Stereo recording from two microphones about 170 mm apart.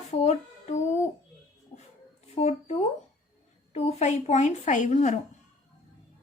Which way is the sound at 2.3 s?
40° left (ahead or behind).